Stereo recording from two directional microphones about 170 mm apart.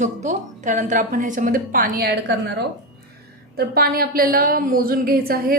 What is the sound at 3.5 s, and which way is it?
A woman's voice, 65° right (ahead or behind).